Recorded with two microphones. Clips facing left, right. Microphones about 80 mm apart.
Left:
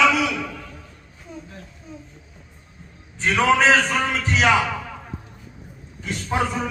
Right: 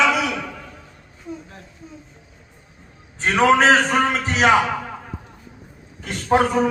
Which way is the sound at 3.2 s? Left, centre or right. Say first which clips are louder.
Right 3 dB; right.